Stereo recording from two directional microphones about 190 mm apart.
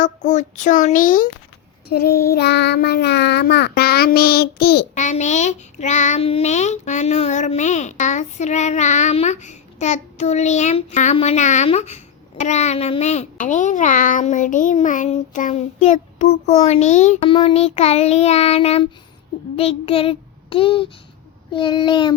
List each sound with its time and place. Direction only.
0.0 s a child's voice: 40° left (ahead or behind)
1.9 s child singing: 55° left (ahead or behind)
4.9 s a child's voice: 40° left (ahead or behind)
21.5 s child singing: 25° left (ahead or behind)